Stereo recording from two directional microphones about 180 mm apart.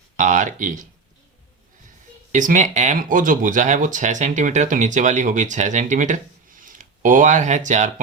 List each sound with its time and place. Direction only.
0.2 s speech: 45° right (ahead or behind)
2.3 s speech: 45° right (ahead or behind)